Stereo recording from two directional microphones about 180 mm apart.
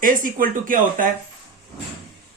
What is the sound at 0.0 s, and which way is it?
Speech, 50° right (ahead or behind).